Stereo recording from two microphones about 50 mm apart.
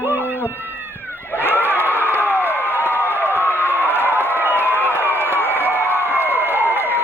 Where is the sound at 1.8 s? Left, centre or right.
Right.